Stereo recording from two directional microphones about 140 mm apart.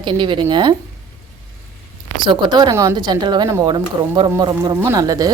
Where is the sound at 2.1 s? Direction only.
35° right (ahead or behind).